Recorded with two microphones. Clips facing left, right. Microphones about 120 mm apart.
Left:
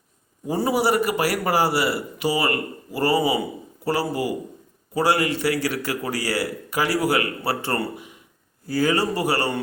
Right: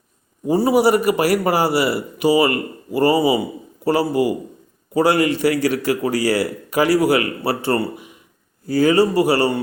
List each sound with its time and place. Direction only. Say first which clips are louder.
0.6 s a man's voice: right 5 dB; 15° right (ahead or behind)